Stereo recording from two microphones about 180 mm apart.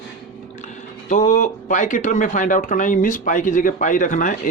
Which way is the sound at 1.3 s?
45° left (ahead or behind).